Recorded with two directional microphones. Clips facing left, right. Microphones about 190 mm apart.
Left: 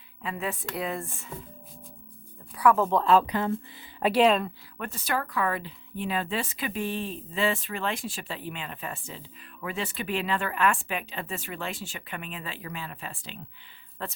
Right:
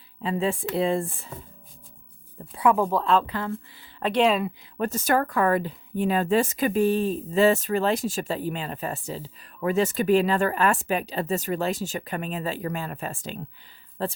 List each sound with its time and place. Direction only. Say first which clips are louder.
0.2 s speech: right 7 dB; 30° right (ahead or behind)
2.6 s speech: right 1 dB; 20° right (ahead or behind)
2.8 s speech: left 1 dB; centre (ahead or behind)
3.2 s speech: left 2 dB; 20° left (ahead or behind)
4.0 s speech: even; 5° left (ahead or behind)
4.8 s speech: right 8 dB; 45° right (ahead or behind)
14.0 s speech: right 8 dB; 35° right (ahead or behind)